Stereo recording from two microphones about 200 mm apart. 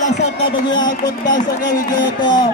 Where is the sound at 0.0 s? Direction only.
35° left (ahead or behind).